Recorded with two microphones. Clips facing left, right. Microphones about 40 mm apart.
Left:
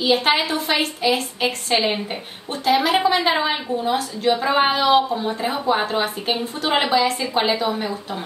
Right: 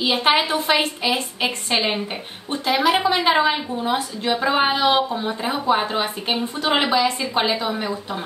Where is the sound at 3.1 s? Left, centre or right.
Centre.